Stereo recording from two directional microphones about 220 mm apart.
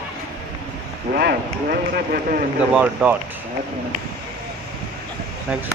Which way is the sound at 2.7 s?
5° right (ahead or behind).